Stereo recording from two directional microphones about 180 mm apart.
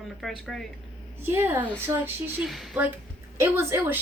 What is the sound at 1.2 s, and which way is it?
Speech, 10° right (ahead or behind).